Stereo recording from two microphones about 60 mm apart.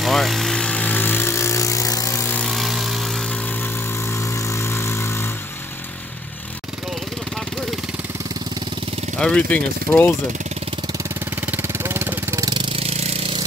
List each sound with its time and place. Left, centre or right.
0.0 s vehicle: centre
0.6 s vehicle: centre
0.8 s vehicle: left
2.4 s vehicle: centre
4.4 s vehicle: left
9.2 s speech: centre
11.4 s vehicle: right